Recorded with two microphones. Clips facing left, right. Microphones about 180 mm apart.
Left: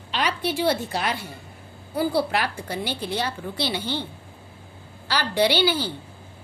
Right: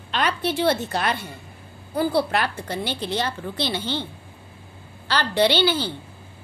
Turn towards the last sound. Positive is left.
turn(degrees=10)  # may be behind; listen again after turning